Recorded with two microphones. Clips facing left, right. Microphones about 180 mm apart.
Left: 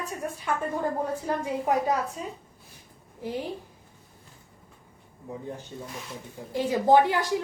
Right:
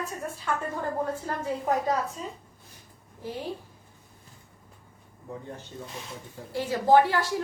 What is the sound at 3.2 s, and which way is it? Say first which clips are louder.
Speech: left 3 dB; 15° left (ahead or behind).